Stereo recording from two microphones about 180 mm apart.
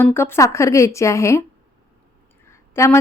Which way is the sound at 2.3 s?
15° left (ahead or behind).